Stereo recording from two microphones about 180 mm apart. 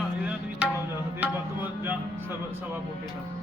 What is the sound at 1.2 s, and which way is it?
Music, 10° right (ahead or behind).